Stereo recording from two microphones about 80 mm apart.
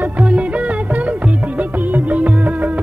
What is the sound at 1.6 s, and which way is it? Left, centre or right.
Music, right.